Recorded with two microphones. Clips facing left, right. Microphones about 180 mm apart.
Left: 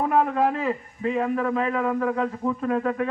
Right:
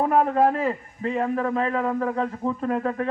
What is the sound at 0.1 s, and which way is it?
A man's voice, 35° right (ahead or behind).